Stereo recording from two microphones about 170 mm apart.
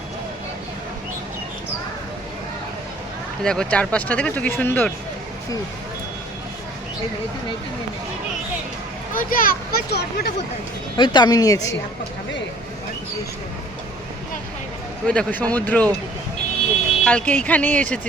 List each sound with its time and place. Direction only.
3.4 s speech: 5° left (ahead or behind)
9.1 s speech: 55° left (ahead or behind); by 10.3 s 75° left (ahead or behind)
10.9 s a woman's voice: 25° left (ahead or behind)
15.0 s speech: 5° left (ahead or behind)
17.0 s speech: 5° left (ahead or behind)